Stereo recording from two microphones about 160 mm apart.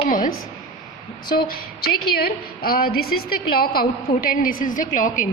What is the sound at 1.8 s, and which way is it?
A woman's voice, 75° left (ahead or behind).